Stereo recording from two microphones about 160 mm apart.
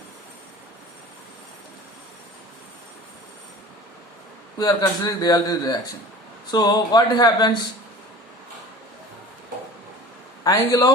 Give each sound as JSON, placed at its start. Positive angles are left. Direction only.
{"t": 4.5, "sound": "speech", "side_deg": 25}
{"t": 10.4, "sound": "speech", "side_deg": 25}